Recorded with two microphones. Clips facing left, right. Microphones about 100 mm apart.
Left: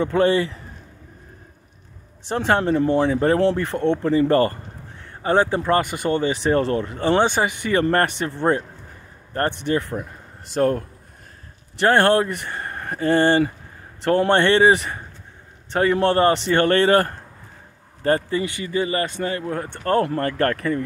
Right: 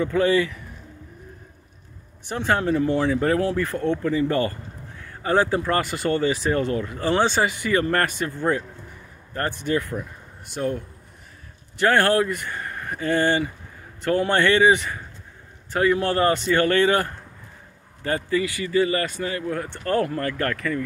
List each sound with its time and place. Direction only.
0.0 s speech: 30° left (ahead or behind)
2.2 s speech: 30° left (ahead or behind)
2.9 s speech: 20° left (ahead or behind); by 4.5 s 40° left (ahead or behind)
5.0 s speech: 25° left (ahead or behind)
10.6 s a man's voice: 55° left (ahead or behind)
11.8 s speech: 30° left (ahead or behind)